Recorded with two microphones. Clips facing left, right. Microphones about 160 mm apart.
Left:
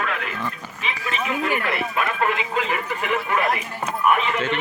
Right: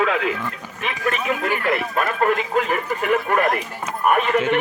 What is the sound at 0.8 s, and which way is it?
Speech, 55° right (ahead or behind).